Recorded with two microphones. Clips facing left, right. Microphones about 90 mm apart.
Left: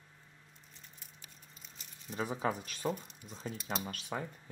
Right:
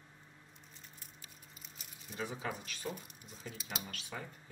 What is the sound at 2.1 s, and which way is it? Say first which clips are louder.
Speech: left 6 dB; 40° left (ahead or behind).